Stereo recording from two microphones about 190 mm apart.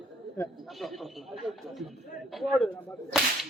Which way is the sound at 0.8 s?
Centre (ahead or behind).